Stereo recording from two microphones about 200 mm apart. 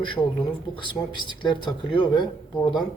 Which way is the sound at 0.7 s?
25° left (ahead or behind).